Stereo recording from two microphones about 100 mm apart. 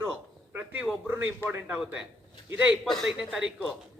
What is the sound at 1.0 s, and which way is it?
A man's voice, 20° right (ahead or behind).